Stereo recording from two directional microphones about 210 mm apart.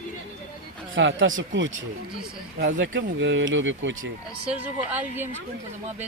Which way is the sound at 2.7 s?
60° right (ahead or behind).